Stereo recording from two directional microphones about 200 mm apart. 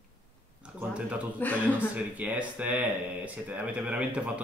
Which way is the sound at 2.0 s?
5° right (ahead or behind).